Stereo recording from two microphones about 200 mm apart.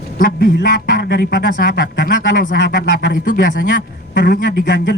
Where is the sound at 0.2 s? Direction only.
50° left (ahead or behind).